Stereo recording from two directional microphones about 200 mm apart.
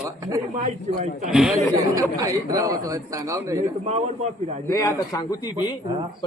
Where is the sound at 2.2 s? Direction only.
15° right (ahead or behind).